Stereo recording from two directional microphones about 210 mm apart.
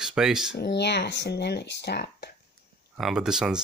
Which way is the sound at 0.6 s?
55° left (ahead or behind).